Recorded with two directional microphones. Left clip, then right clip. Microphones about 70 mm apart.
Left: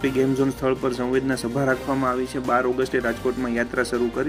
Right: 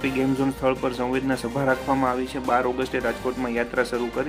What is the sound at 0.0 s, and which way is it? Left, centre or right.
Speech, centre.